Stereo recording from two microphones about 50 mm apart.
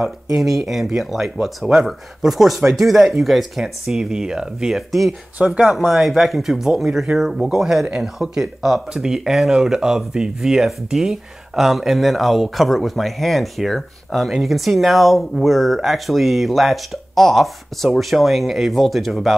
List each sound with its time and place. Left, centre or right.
0.0 s speech: centre
5.7 s speech: centre